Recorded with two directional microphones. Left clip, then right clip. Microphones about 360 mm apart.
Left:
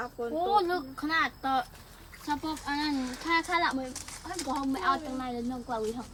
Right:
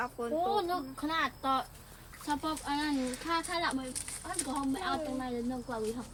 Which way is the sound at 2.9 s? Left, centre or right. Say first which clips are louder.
Even; centre.